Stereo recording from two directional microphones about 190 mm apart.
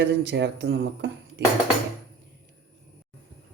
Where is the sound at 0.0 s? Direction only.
70° right (ahead or behind).